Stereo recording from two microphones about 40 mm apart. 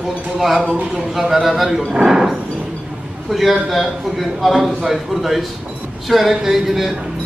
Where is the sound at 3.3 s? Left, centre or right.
Centre.